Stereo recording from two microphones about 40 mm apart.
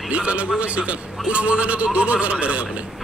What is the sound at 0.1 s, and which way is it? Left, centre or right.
A man's voice, right.